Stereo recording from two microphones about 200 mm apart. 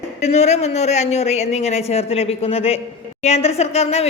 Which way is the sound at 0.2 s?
35° left (ahead or behind).